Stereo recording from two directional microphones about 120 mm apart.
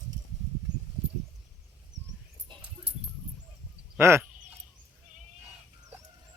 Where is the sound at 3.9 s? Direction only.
20° right (ahead or behind).